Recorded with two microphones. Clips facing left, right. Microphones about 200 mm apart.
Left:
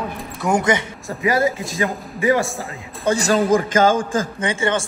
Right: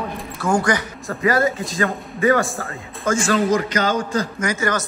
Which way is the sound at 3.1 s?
40° left (ahead or behind).